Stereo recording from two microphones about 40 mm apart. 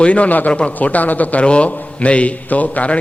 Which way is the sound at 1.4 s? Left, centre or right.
Left.